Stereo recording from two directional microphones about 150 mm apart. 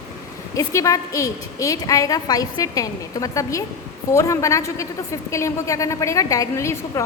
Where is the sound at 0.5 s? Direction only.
20° left (ahead or behind).